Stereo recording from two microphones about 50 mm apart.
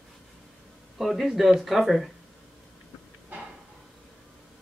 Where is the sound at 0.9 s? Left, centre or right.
Centre.